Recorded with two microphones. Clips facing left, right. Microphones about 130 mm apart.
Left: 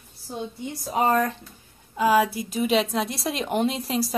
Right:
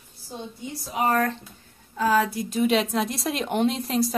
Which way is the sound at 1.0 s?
20° left (ahead or behind).